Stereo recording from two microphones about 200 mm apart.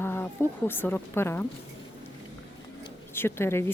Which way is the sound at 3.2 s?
10° left (ahead or behind).